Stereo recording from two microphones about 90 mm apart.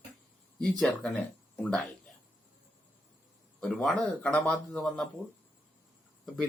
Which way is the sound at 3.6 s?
5° left (ahead or behind).